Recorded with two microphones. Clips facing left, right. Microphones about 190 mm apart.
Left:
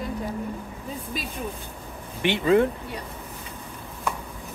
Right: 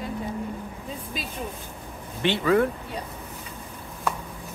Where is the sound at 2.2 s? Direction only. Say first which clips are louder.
Left 1 dB; 20° left (ahead or behind).